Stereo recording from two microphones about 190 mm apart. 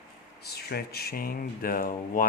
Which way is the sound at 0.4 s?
55° left (ahead or behind).